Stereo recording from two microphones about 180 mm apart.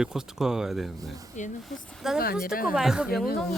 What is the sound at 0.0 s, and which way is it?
Speech, centre (ahead or behind).